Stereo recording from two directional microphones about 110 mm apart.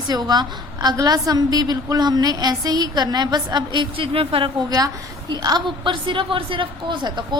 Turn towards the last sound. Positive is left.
turn(degrees=-45)  # may be behind; listen again after turning